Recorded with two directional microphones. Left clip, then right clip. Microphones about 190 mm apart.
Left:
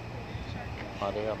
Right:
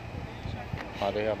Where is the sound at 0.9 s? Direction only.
20° right (ahead or behind).